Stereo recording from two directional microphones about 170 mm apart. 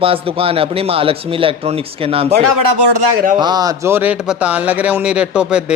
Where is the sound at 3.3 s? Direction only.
25° right (ahead or behind); by 5.7 s 5° right (ahead or behind).